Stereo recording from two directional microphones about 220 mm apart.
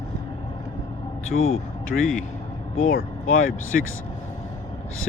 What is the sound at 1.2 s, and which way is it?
Speech, 65° left (ahead or behind).